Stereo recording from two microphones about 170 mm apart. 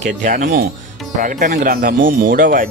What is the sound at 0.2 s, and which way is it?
Speech, 50° right (ahead or behind).